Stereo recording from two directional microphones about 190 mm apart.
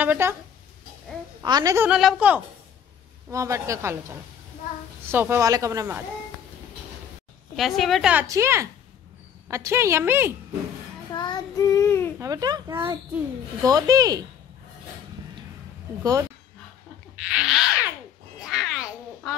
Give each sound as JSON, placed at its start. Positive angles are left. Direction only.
{"t": 0.0, "sound": "a child's voice", "side_deg": -10}
{"t": 1.4, "sound": "a woman's voice", "side_deg": -20}
{"t": 1.9, "sound": "a woman's voice", "side_deg": -5}
{"t": 7.5, "sound": "a woman's voice", "side_deg": 0}
{"t": 11.1, "sound": "child singing", "side_deg": 20}
{"t": 12.2, "sound": "a child's voice", "side_deg": -20}
{"t": 16.0, "sound": "a child's voice", "side_deg": -20}
{"t": 17.2, "sound": "a sound", "side_deg": -5}